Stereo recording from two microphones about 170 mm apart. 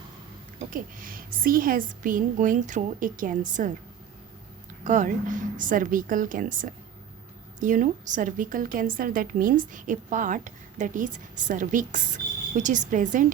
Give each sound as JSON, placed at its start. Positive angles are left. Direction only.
{"t": 0.7, "sound": "a woman's voice", "side_deg": -55}
{"t": 4.8, "sound": "a woman's voice", "side_deg": -45}